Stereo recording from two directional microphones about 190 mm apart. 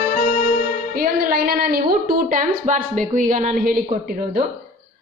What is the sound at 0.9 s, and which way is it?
A woman's voice, 50° right (ahead or behind).